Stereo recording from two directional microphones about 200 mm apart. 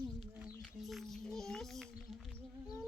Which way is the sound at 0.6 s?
Centre (ahead or behind).